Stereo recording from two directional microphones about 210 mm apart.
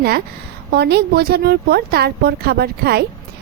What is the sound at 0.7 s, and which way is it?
Speech, 50° right (ahead or behind).